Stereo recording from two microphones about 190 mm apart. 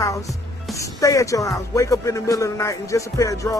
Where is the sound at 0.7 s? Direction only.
15° left (ahead or behind).